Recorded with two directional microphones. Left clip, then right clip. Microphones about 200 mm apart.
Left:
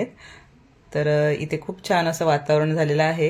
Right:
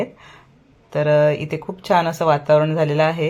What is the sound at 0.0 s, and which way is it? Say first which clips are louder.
Speech: right 3 dB; centre (ahead or behind).